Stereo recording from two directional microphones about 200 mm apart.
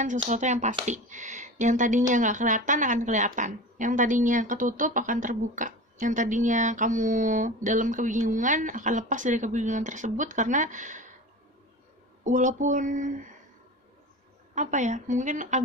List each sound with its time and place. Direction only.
0.2 s speech: 35° right (ahead or behind)
12.3 s speech: 40° right (ahead or behind)
14.5 s speech: 35° right (ahead or behind)